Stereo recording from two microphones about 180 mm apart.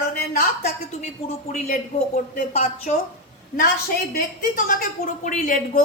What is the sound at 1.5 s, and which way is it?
A woman's voice, 45° left (ahead or behind).